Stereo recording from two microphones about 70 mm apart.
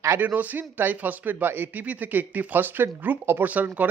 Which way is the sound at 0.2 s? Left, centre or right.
Right.